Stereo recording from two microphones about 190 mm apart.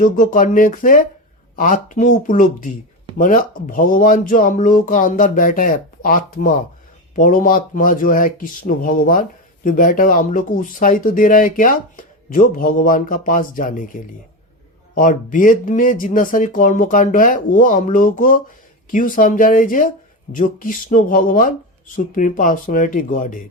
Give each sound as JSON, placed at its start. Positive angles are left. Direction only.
{"t": 0.0, "sound": "speech", "side_deg": 45}